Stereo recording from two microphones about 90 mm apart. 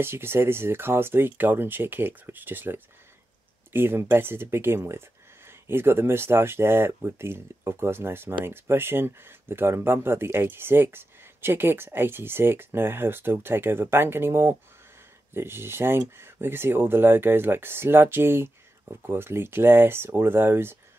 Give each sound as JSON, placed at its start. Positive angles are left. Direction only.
{"t": 0.0, "sound": "speech", "side_deg": -25}